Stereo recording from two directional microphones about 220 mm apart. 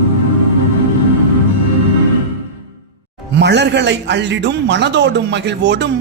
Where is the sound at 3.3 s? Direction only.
50° right (ahead or behind).